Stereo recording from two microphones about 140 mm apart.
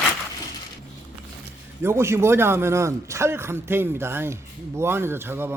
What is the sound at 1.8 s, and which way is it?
A man's voice, 20° right (ahead or behind).